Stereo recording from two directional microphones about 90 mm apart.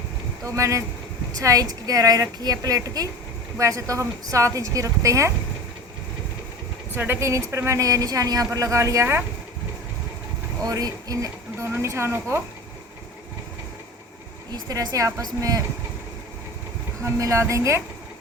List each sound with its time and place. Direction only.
0.4 s a woman's voice: 35° right (ahead or behind)
6.9 s speech: 25° right (ahead or behind)
10.6 s speech: 45° right (ahead or behind)
11.6 s speech: 30° right (ahead or behind)
14.5 s a woman's voice: 45° right (ahead or behind)
17.0 s speech: 35° right (ahead or behind)